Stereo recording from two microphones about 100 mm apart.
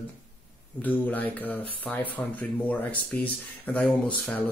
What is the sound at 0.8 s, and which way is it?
Speech, 15° left (ahead or behind).